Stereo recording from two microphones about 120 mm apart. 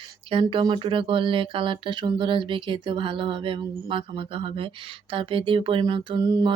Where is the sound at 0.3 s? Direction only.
45° right (ahead or behind).